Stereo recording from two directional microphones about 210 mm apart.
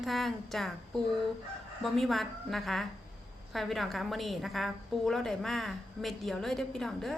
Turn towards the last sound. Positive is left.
turn(degrees=0)  # may be behind; listen again after turning